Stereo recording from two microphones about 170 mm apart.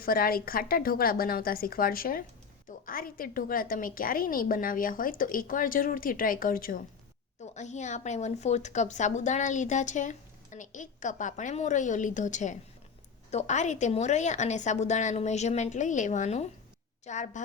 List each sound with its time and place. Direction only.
0.0 s a woman's voice: 60° left (ahead or behind)
7.5 s speech: 45° left (ahead or behind)